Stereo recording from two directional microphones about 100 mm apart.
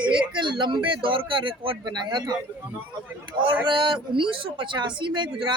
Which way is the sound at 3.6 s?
50° right (ahead or behind).